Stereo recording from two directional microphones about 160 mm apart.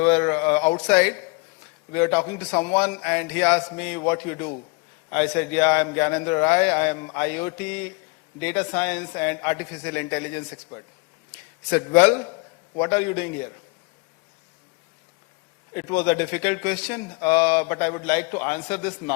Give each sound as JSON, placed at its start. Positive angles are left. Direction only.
{"t": 0.0, "sound": "speech", "side_deg": 15}
{"t": 1.9, "sound": "speech", "side_deg": 15}
{"t": 4.0, "sound": "a man's voice", "side_deg": 25}
{"t": 5.4, "sound": "a man's voice", "side_deg": 15}
{"t": 15.7, "sound": "speech", "side_deg": 15}